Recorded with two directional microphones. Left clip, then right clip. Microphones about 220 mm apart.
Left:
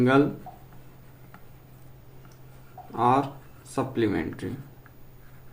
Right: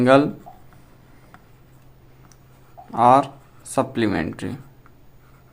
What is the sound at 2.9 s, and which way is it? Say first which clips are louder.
Speech: right 8 dB; 45° right (ahead or behind).